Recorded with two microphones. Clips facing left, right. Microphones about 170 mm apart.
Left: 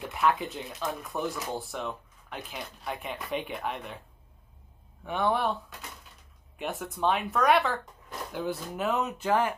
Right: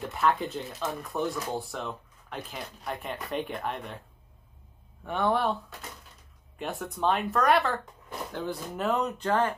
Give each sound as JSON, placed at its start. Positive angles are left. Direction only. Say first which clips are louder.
{"t": 0.0, "sound": "speech", "louder": "even", "side_deg": 0}
{"t": 5.0, "sound": "speech", "louder": "right 1 dB", "side_deg": 0}